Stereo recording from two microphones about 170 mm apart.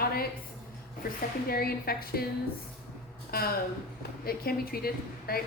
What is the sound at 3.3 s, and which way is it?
Speech, 60° left (ahead or behind).